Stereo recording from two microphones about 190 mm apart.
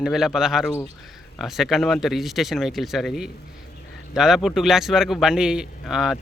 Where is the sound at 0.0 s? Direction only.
Centre (ahead or behind).